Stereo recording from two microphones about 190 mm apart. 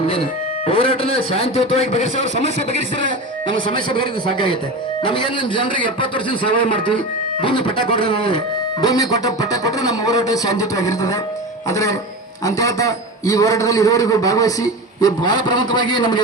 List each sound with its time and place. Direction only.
0.7 s a man's voice: 30° left (ahead or behind)
3.8 s speech: 25° left (ahead or behind)
7.4 s a man's voice: 25° left (ahead or behind)